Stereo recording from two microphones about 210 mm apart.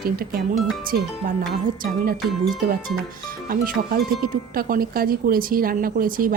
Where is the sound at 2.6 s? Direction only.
40° right (ahead or behind).